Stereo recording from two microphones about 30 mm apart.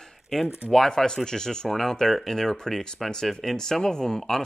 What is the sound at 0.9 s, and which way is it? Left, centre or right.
Speech, left.